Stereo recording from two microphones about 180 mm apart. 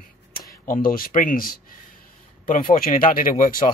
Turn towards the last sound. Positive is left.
turn(degrees=50)  # may be behind; listen again after turning